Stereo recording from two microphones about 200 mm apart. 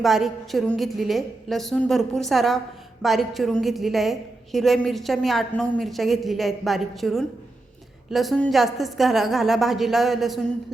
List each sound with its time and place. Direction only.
0.0 s a woman's voice: centre (ahead or behind)